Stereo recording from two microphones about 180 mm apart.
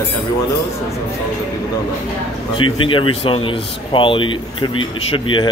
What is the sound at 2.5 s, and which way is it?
Speech, 30° left (ahead or behind).